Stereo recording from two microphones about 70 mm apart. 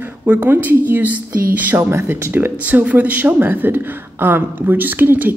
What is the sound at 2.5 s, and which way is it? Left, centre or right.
Speech, right.